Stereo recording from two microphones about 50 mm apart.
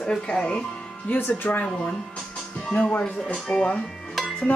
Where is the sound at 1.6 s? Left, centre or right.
Centre.